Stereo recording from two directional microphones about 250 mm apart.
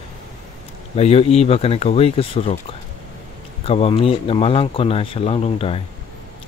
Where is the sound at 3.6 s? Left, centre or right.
Left.